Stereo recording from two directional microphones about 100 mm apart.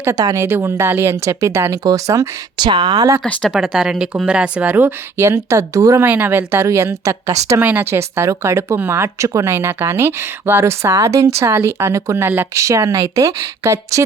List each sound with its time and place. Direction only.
0.2 s speech: 40° right (ahead or behind)
0.4 s speech: 25° right (ahead or behind)
2.6 s speech: 45° right (ahead or behind)
3.5 s speech: 5° right (ahead or behind)
5.1 s speech: 25° right (ahead or behind)
6.1 s speech: 20° right (ahead or behind)
7.6 s speech: 15° right (ahead or behind)